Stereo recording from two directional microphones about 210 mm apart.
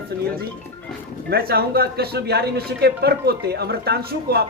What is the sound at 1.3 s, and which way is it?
A man's voice, 45° right (ahead or behind).